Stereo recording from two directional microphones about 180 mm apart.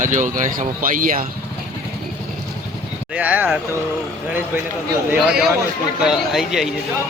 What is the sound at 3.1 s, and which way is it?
Speech, 10° right (ahead or behind).